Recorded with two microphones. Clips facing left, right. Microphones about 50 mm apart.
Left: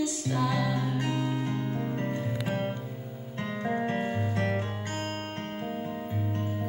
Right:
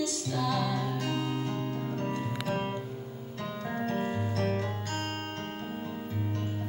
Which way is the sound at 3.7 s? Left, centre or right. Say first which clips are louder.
Left 4 dB; left.